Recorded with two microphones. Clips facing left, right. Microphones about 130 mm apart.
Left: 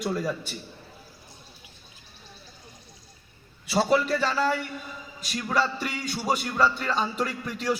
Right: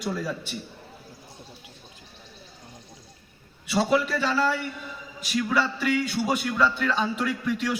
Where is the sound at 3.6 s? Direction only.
35° left (ahead or behind).